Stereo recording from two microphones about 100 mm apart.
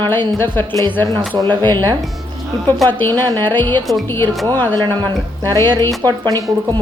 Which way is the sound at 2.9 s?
20° left (ahead or behind).